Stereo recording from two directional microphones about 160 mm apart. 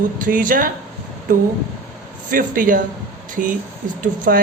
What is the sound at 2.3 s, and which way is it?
Speech, 60° right (ahead or behind).